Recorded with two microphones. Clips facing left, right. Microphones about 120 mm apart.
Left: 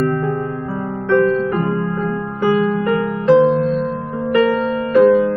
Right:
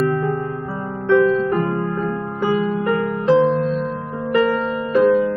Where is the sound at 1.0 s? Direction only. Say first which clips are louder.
Even; 5° right (ahead or behind).